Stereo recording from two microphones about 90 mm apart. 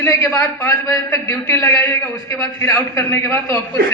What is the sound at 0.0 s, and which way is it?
A man's voice, 30° left (ahead or behind).